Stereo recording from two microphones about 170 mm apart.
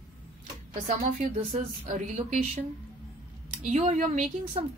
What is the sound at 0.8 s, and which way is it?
Speech, 50° right (ahead or behind).